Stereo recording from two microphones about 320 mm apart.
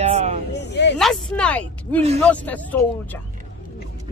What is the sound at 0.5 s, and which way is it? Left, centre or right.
Speech, left.